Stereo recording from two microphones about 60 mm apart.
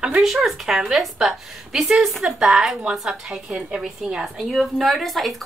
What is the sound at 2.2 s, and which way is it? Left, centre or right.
Speech, centre.